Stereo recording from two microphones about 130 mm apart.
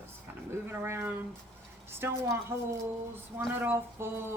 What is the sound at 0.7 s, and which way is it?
Speech, 20° right (ahead or behind).